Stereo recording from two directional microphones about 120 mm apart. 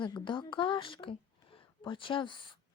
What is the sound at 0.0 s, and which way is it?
A woman's voice, 40° left (ahead or behind).